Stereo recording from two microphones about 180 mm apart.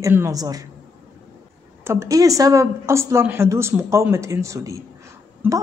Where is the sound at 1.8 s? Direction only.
15° right (ahead or behind).